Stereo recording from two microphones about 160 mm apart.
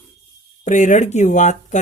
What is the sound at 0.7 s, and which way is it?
Speech, 50° left (ahead or behind).